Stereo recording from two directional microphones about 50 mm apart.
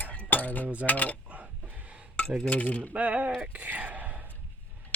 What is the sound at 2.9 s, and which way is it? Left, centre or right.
Speech, right.